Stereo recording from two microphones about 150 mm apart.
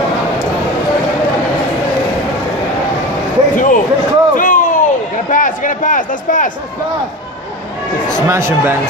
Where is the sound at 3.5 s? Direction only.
60° left (ahead or behind).